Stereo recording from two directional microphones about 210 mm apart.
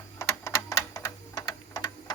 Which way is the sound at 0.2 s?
15° left (ahead or behind).